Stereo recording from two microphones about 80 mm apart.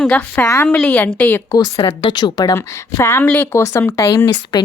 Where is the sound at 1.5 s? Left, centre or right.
Left.